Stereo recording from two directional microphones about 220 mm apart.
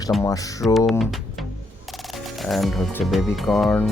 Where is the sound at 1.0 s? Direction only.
Centre (ahead or behind).